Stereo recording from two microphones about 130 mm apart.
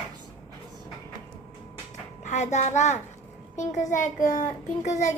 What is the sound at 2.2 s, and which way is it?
A child's voice, 65° left (ahead or behind).